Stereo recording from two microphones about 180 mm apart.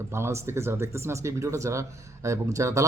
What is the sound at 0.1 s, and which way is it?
Speech, 15° right (ahead or behind).